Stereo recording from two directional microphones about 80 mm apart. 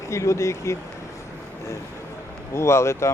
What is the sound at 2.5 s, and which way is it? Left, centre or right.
Speech, left.